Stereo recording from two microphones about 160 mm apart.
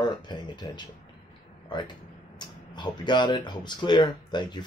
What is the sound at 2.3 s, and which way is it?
Speech, 30° left (ahead or behind).